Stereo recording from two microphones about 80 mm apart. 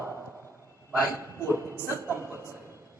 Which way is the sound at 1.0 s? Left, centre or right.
Right.